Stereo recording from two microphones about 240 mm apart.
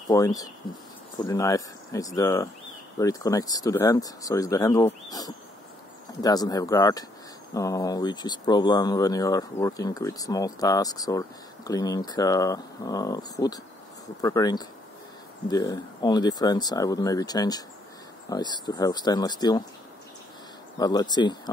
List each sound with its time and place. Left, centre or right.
0.1 s speech: centre
20.7 s speech: centre